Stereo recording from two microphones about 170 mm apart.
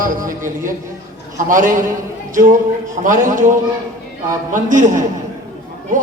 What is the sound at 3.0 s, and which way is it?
Speech, 50° right (ahead or behind).